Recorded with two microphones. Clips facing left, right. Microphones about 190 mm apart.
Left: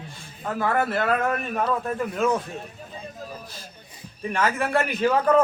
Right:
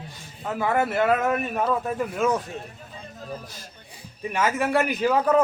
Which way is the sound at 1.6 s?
Centre (ahead or behind).